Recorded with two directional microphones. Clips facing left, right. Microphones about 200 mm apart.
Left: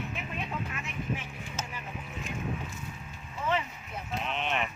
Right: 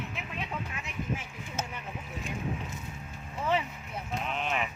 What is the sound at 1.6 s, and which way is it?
Boat, 60° right (ahead or behind).